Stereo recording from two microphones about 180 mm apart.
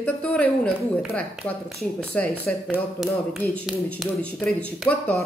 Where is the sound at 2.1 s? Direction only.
10° left (ahead or behind).